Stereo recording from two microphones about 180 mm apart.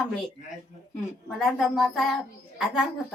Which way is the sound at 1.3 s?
Centre (ahead or behind).